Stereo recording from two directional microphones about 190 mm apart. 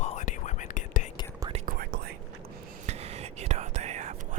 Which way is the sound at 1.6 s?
50° right (ahead or behind).